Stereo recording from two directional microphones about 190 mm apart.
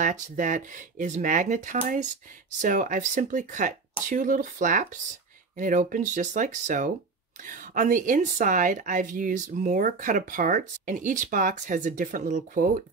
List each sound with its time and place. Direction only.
0.0 s a woman's voice: 40° right (ahead or behind)